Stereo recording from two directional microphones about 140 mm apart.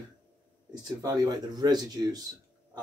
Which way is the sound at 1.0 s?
25° right (ahead or behind).